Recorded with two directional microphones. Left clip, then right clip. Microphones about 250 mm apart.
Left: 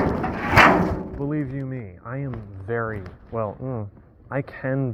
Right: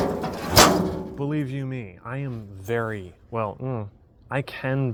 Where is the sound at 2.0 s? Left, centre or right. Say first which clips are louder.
Left 2 dB; right.